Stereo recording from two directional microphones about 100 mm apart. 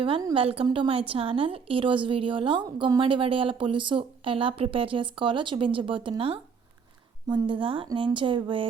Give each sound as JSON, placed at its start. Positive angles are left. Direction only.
{"t": 0.3, "sound": "speech", "side_deg": -65}
{"t": 7.3, "sound": "speech", "side_deg": -55}